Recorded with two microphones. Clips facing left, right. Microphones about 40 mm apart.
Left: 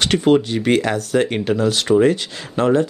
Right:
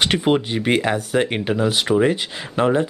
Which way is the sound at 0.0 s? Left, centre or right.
Centre.